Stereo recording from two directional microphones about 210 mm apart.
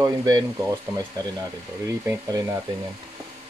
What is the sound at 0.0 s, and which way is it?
Speech, 20° right (ahead or behind).